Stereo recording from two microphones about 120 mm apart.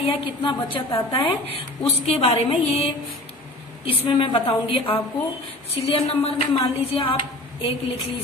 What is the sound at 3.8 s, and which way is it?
Speech, 50° left (ahead or behind).